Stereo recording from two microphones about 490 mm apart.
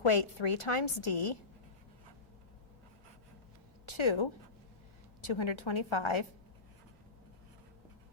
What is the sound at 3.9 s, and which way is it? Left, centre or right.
A woman's voice, left.